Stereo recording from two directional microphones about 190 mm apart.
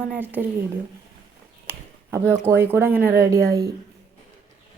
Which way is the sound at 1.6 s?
10° right (ahead or behind).